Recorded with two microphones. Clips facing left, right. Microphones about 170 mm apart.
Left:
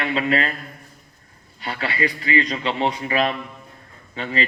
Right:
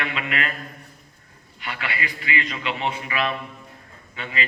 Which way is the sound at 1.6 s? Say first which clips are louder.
Left 6 dB; 35° left (ahead or behind).